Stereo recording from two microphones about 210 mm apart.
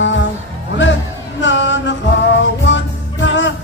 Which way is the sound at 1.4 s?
60° left (ahead or behind).